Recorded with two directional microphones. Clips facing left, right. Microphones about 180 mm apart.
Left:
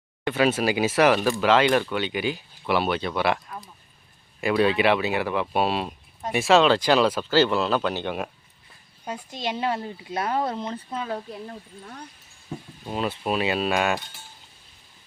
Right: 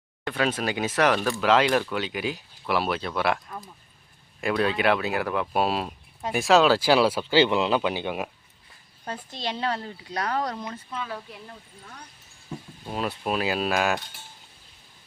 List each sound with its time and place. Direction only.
0.3 s speech: 5° left (ahead or behind)
9.0 s speech: 15° left (ahead or behind); by 11.5 s 40° left (ahead or behind)
12.5 s speech: 5° left (ahead or behind)